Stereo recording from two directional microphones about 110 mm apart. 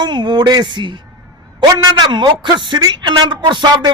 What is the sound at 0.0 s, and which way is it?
A man's voice, 45° right (ahead or behind).